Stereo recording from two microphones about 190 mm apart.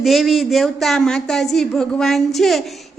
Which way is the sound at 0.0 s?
Centre (ahead or behind).